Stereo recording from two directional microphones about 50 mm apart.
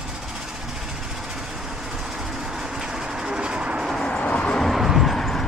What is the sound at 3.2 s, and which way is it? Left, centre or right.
Train, centre.